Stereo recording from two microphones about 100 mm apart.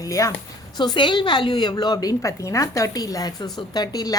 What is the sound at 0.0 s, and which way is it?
Speech, 35° left (ahead or behind).